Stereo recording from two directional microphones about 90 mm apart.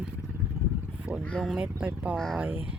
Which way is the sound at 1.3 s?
Centre (ahead or behind).